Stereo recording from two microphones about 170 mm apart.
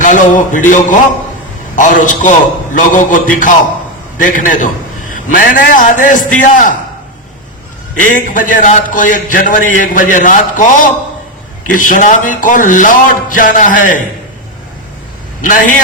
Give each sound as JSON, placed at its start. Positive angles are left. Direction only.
{"t": 0.0, "sound": "a man's voice", "side_deg": 50}
{"t": 7.9, "sound": "a man's voice", "side_deg": 50}
{"t": 15.4, "sound": "a man's voice", "side_deg": 50}